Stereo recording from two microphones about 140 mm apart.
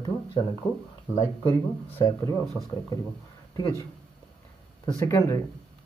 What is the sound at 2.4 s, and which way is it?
Speech, centre (ahead or behind).